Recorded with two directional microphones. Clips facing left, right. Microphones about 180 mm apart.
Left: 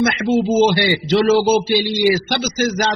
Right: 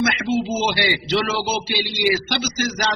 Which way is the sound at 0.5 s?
50° left (ahead or behind).